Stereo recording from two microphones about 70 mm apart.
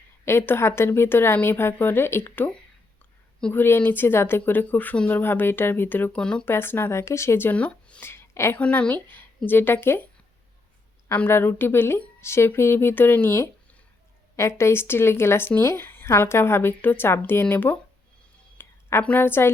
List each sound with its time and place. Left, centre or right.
0.3 s a woman's voice: left
3.5 s a woman's voice: left
6.1 s speech: centre
6.4 s a woman's voice: left
7.5 s speech: centre
8.0 s a sound: left
8.5 s speech: centre
11.3 s a woman's voice: left
18.5 s a sound: left
19.2 s a woman's voice: left